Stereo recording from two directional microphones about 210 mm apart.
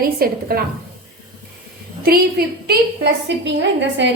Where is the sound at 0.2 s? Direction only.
45° right (ahead or behind).